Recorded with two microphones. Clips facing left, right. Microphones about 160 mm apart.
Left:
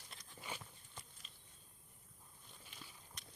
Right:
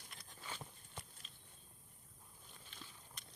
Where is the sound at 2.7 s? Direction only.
10° left (ahead or behind).